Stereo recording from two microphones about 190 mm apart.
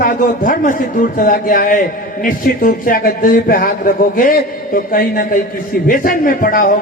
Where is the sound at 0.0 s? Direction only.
45° left (ahead or behind).